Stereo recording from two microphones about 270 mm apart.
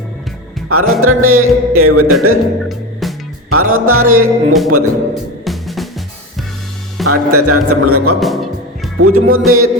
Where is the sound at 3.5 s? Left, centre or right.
Right.